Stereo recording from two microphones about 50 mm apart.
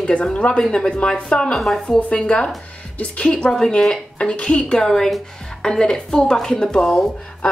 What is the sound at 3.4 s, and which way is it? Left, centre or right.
Speech, centre.